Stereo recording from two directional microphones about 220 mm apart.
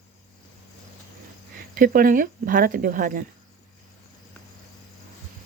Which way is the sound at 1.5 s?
40° right (ahead or behind).